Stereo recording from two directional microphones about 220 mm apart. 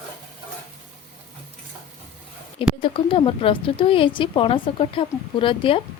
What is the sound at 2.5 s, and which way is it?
A woman's voice, 25° left (ahead or behind).